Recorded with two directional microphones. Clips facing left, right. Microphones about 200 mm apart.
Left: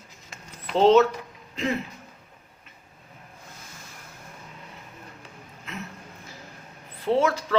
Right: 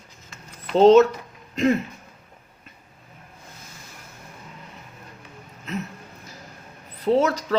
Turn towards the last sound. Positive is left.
turn(degrees=-40)  # may be behind; listen again after turning